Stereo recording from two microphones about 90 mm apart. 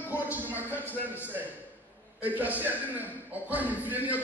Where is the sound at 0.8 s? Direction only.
20° left (ahead or behind).